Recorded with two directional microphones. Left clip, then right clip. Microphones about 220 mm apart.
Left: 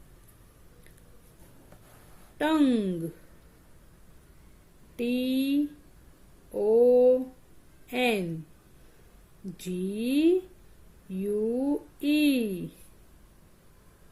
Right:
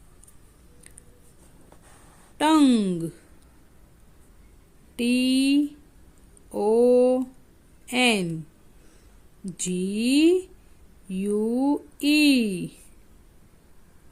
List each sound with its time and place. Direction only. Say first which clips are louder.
2.4 s speech: right 5 dB; 40° right (ahead or behind)
4.9 s speech: right 5 dB; 40° right (ahead or behind)
6.5 s mantra: right 2 dB; 40° right (ahead or behind)
7.9 s speech: right 5 dB; 40° right (ahead or behind)
9.6 s speech: right 5 dB; 40° right (ahead or behind)